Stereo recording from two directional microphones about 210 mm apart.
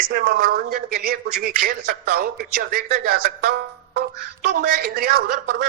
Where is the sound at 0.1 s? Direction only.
45° right (ahead or behind).